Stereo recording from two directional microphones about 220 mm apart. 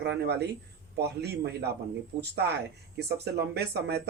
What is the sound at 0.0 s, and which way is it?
Speech, 50° right (ahead or behind).